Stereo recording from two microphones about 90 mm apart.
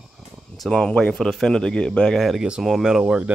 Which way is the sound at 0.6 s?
10° left (ahead or behind).